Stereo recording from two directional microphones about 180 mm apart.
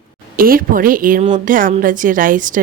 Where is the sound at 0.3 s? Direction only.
55° right (ahead or behind).